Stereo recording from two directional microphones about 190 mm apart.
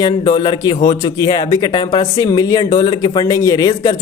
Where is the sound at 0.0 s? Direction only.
25° left (ahead or behind).